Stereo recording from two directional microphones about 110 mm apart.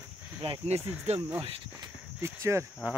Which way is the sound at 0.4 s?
55° right (ahead or behind).